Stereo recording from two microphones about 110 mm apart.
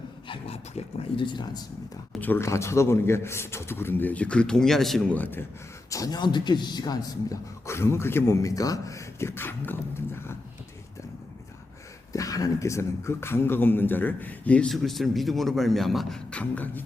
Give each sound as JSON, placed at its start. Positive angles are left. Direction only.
{"t": 0.3, "sound": "speech", "side_deg": 65}
{"t": 1.2, "sound": "speech", "side_deg": 40}
{"t": 2.2, "sound": "a man's voice", "side_deg": 20}
{"t": 5.1, "sound": "speech", "side_deg": 15}
{"t": 5.9, "sound": "speech", "side_deg": 35}
{"t": 7.7, "sound": "a man's voice", "side_deg": 25}
{"t": 12.1, "sound": "a man's voice", "side_deg": 30}
{"t": 14.7, "sound": "a man's voice", "side_deg": 0}